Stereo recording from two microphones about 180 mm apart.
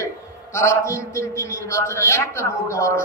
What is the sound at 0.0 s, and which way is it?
A man's voice, 15° left (ahead or behind).